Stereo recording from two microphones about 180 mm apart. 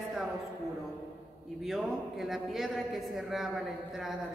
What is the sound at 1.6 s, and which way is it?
A woman's voice, centre (ahead or behind).